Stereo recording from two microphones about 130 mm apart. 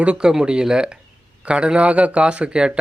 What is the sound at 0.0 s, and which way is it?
Speech, 10° right (ahead or behind).